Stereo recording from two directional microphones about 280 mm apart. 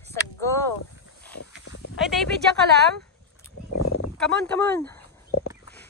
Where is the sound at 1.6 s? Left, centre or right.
Left.